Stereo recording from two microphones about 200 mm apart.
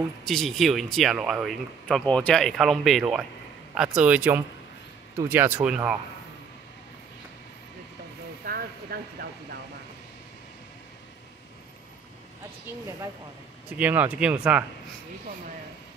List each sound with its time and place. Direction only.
0.2 s speech: centre (ahead or behind)
8.5 s vehicle: 50° right (ahead or behind)
13.7 s speech: 10° right (ahead or behind)